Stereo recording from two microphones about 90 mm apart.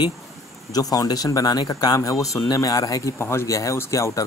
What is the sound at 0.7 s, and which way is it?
Speech, 45° left (ahead or behind).